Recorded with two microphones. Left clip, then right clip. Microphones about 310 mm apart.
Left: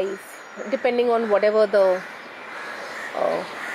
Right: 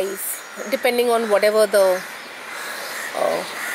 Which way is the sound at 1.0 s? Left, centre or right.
Centre.